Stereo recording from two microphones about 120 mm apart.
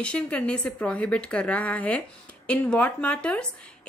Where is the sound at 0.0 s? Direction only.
10° left (ahead or behind).